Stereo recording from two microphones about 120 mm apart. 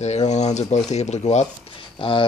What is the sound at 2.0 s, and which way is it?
Speech, 45° left (ahead or behind).